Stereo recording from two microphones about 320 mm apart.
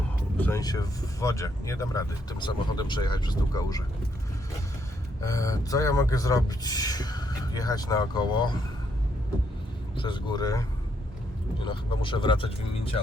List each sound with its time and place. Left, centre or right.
0.3 s speech: centre
5.2 s speech: centre
9.9 s speech: centre
11.6 s speech: centre